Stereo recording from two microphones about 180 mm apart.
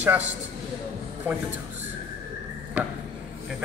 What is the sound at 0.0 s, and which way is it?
Speech, 10° right (ahead or behind).